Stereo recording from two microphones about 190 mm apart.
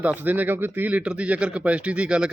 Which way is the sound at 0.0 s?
10° right (ahead or behind).